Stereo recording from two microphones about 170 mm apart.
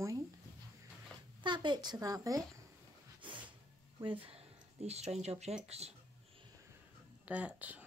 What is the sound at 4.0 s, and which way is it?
Speech, 30° right (ahead or behind).